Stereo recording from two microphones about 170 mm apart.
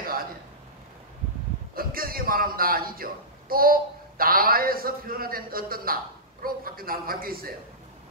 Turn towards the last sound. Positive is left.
turn(degrees=-60)  # may be behind; listen again after turning